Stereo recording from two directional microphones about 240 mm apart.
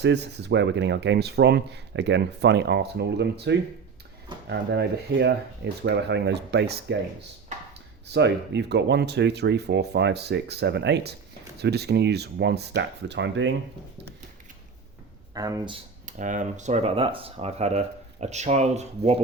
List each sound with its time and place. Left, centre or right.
0.0 s speech: right
8.0 s speech: right
15.4 s speech: centre
16.0 s speech: right